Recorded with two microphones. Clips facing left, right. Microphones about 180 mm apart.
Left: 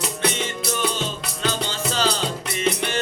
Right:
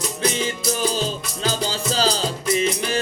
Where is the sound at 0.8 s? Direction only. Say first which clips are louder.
Right 1 dB; 35° right (ahead or behind).